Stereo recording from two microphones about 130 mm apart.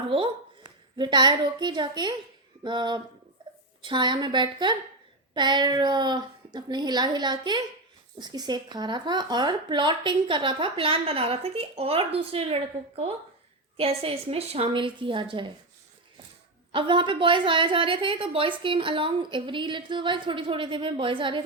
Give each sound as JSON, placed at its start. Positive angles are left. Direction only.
{"t": 0.1, "sound": "a woman's voice", "side_deg": -40}
{"t": 3.4, "sound": "a sound", "side_deg": -40}
{"t": 3.8, "sound": "a woman's voice", "side_deg": -35}
{"t": 13.7, "sound": "a woman's voice", "side_deg": -45}
{"t": 16.7, "sound": "a woman's voice", "side_deg": -40}